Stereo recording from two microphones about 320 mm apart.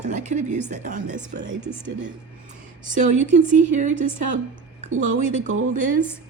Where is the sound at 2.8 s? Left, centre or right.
Right.